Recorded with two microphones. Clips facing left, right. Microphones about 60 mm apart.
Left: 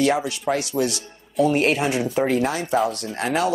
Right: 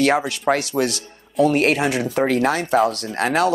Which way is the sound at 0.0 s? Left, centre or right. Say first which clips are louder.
Right 3 dB; right.